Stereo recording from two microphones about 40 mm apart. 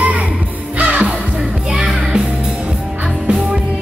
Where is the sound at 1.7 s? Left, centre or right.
Centre.